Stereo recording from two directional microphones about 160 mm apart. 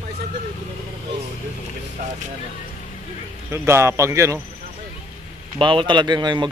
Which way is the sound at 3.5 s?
15° right (ahead or behind).